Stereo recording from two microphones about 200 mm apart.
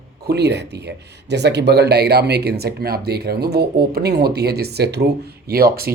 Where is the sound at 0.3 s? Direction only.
55° right (ahead or behind).